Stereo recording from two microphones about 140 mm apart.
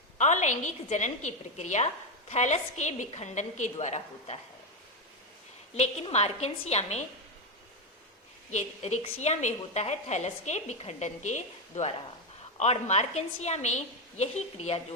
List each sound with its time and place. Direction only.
0.2 s a woman's voice: 60° left (ahead or behind)
5.7 s a woman's voice: 50° left (ahead or behind)
8.4 s a woman's voice: 55° left (ahead or behind)